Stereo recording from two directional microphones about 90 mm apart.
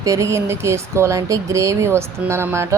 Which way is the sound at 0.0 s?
35° right (ahead or behind).